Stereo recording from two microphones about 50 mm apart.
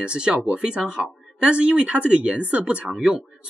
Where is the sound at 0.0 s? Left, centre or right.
Centre.